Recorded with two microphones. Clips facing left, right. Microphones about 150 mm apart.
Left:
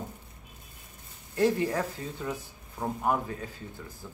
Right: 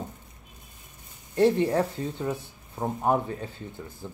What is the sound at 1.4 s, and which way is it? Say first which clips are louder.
Speech: right 4 dB; 30° right (ahead or behind).